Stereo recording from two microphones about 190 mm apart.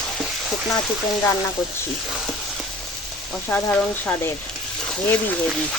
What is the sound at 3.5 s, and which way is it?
Speech, 10° left (ahead or behind).